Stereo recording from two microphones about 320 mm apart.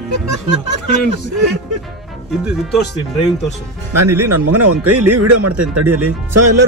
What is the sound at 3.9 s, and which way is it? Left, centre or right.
Speech, right.